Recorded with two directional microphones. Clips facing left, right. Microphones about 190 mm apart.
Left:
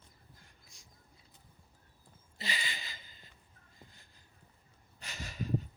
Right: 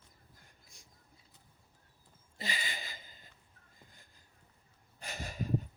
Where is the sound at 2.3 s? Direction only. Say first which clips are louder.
Even; 45° right (ahead or behind).